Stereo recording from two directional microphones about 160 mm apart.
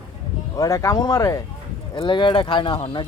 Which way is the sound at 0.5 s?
20° left (ahead or behind).